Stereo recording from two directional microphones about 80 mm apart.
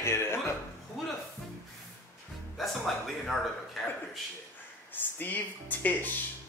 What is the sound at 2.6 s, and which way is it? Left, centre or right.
Speech, centre.